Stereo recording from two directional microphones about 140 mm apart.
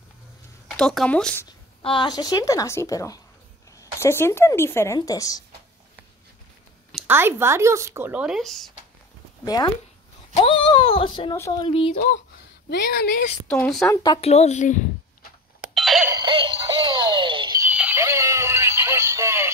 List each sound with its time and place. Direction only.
0.7 s speech: centre (ahead or behind)
1.8 s a woman's voice: 35° left (ahead or behind)
7.1 s speech: 15° right (ahead or behind); by 8.7 s centre (ahead or behind)
9.4 s speech: 30° left (ahead or behind)
11.3 s a woman's voice: 20° left (ahead or behind)
11.6 s speech: 40° left (ahead or behind)
13.5 s speech: 5° left (ahead or behind)
14.2 s a woman's voice: 50° left (ahead or behind)
15.7 s a sound: centre (ahead or behind)
16.2 s music: 35° right (ahead or behind)
17.6 s synthetic singing: 10° right (ahead or behind)